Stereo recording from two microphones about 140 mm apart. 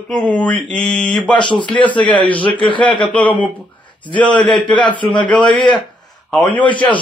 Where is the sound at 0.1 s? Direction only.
10° left (ahead or behind).